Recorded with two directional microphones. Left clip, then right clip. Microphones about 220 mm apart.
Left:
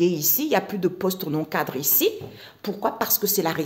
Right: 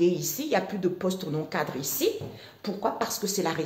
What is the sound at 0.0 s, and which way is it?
A woman's voice, 45° left (ahead or behind).